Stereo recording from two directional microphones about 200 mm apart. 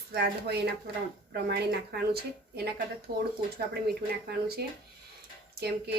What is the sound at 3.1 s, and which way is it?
Speech, 50° right (ahead or behind).